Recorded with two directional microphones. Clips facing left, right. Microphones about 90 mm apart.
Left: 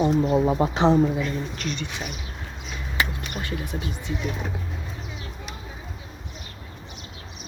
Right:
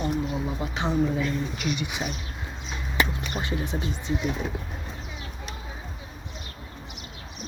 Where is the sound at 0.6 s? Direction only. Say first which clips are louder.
Left 9 dB; 35° left (ahead or behind).